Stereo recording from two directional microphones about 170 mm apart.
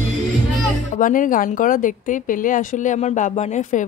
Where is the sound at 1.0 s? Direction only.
50° left (ahead or behind).